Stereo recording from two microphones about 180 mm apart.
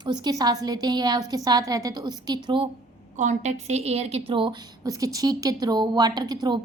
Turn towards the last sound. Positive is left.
turn(degrees=-20)  # may be behind; listen again after turning